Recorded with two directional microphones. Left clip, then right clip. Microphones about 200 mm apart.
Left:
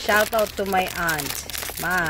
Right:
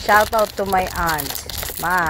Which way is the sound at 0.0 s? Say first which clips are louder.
Right 5 dB; centre (ahead or behind).